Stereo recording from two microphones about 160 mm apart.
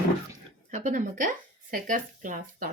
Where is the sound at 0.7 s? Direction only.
50° right (ahead or behind).